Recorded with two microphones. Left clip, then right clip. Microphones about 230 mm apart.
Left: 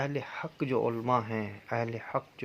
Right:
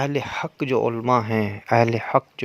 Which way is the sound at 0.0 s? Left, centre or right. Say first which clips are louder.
Right 10 dB; right.